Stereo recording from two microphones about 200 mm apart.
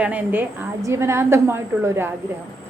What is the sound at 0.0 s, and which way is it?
A woman's voice, 10° right (ahead or behind).